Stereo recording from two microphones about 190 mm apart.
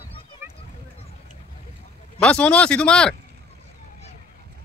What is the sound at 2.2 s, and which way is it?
Speech, 5° left (ahead or behind).